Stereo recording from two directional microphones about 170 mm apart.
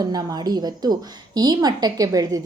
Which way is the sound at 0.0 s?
25° right (ahead or behind).